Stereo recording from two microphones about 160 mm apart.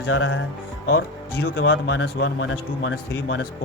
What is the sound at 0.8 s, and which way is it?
Speech, 90° left.